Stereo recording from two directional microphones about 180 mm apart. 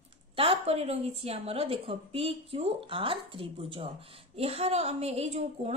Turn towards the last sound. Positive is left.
turn(degrees=-35)  # may be behind; listen again after turning